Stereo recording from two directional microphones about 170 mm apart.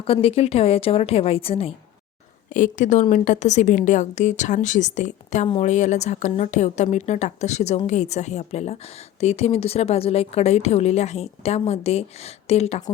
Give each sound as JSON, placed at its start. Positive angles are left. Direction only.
{"t": 0.0, "sound": "a woman's voice", "side_deg": 35}
{"t": 2.5, "sound": "a woman's voice", "side_deg": 50}